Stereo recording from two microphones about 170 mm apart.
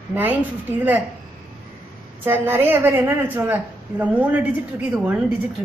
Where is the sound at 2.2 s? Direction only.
15° right (ahead or behind).